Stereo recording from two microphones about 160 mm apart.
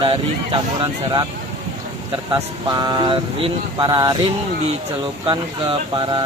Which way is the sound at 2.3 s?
25° right (ahead or behind).